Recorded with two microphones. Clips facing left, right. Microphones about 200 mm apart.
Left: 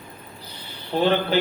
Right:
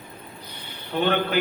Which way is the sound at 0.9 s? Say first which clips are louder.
Left 3 dB; 30° left (ahead or behind).